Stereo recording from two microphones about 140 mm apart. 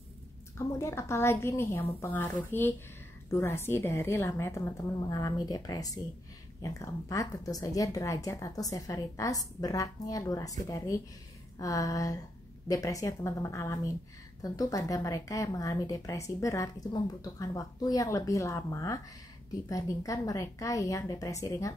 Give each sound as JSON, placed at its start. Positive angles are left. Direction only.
{"t": 0.6, "sound": "speech", "side_deg": 20}